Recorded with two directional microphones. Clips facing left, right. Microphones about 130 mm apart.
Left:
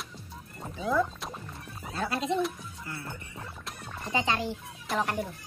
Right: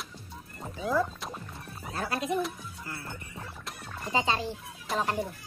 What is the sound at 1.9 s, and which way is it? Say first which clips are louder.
Cat: left 1 dB; 25° left (ahead or behind).